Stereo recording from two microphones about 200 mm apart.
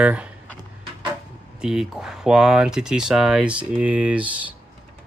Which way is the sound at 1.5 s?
5° right (ahead or behind).